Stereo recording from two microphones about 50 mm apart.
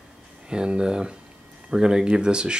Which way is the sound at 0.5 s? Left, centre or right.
Centre.